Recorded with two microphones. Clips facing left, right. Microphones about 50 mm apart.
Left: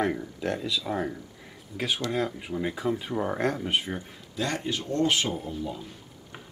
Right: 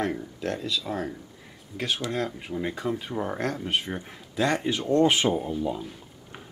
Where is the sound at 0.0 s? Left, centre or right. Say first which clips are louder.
Left 1 dB; centre.